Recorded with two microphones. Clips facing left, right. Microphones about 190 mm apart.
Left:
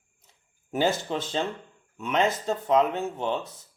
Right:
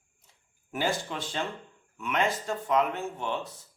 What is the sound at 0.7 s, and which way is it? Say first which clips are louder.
Speech: left 5 dB; 25° left (ahead or behind).